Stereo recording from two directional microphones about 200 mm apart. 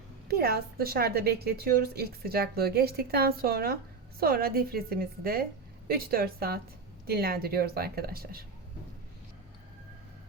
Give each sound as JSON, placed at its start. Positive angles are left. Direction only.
{"t": 0.3, "sound": "a woman's voice", "side_deg": -50}